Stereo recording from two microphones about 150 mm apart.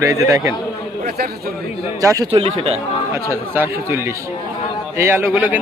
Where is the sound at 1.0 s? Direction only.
90° right.